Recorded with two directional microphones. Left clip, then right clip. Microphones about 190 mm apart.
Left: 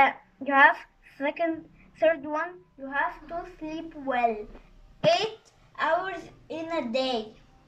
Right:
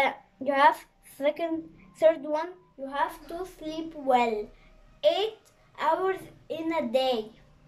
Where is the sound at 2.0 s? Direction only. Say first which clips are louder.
Right 1 dB; 20° right (ahead or behind).